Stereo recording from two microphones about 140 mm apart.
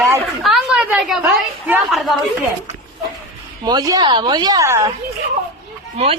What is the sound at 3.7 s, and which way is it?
A woman's voice, 25° right (ahead or behind).